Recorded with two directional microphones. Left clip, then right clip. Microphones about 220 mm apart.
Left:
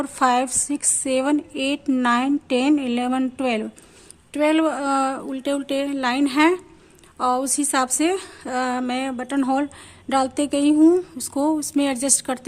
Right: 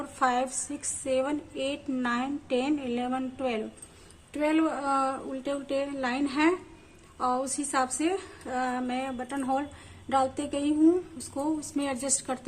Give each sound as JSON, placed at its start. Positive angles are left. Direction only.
{"t": 0.0, "sound": "speech", "side_deg": 45}